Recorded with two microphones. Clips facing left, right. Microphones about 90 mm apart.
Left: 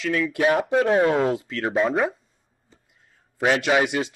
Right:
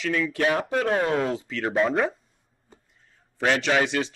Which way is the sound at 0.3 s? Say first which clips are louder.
Left 4 dB; 10° left (ahead or behind).